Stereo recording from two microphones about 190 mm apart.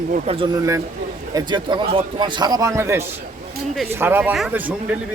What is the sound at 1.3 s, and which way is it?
A man's voice, 25° right (ahead or behind).